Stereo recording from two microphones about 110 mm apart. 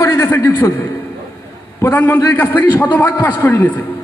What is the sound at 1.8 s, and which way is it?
A man's voice, 20° left (ahead or behind).